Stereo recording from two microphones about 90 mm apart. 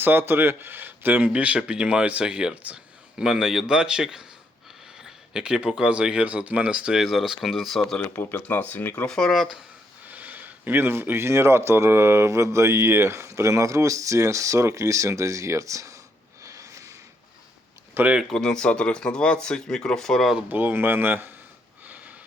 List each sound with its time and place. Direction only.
0.0 s speech: 25° right (ahead or behind); by 8.0 s 5° left (ahead or behind)
8.0 s speech: 25° left (ahead or behind)
9.0 s speech: 5° left (ahead or behind)
10.1 s speech: 20° right (ahead or behind); by 16.0 s 35° right (ahead or behind)
16.4 s a sound: 35° right (ahead or behind)
17.9 s speech: 20° right (ahead or behind)
18.2 s speech: 5° left (ahead or behind)
20.5 s speech: 20° right (ahead or behind)